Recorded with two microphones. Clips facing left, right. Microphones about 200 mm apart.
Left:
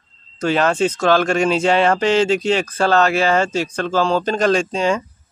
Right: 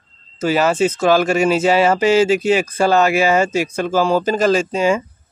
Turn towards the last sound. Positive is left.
turn(degrees=-5)  # may be behind; listen again after turning